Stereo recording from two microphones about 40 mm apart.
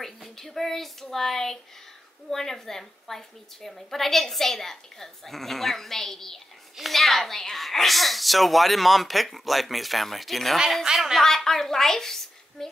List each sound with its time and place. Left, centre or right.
0.0 s a woman's voice: centre
10.9 s a woman's voice: centre
11.2 s speech: centre